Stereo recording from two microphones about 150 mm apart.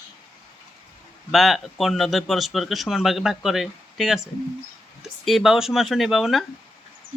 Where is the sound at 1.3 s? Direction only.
Centre (ahead or behind).